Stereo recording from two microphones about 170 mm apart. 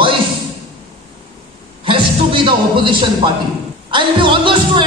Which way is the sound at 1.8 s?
30° right (ahead or behind).